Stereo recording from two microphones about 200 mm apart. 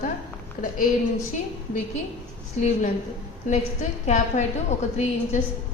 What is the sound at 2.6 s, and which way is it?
A woman's voice, 35° left (ahead or behind).